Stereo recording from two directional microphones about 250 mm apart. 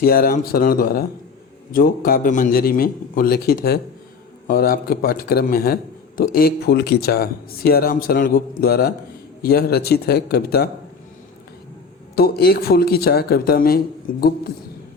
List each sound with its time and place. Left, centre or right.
0.0 s a man's voice: left
12.1 s a man's voice: left